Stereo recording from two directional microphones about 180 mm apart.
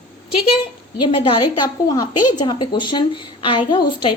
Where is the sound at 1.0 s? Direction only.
30° left (ahead or behind).